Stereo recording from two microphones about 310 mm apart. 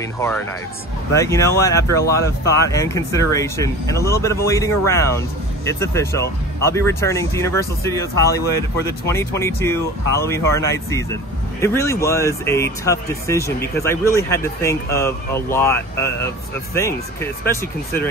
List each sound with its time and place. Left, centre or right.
1.1 s speech: centre